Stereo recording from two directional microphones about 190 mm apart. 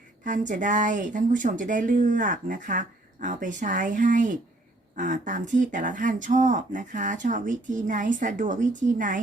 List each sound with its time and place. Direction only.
0.3 s speech: 40° right (ahead or behind)